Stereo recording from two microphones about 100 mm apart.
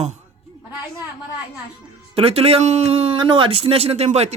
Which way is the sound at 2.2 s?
80° right.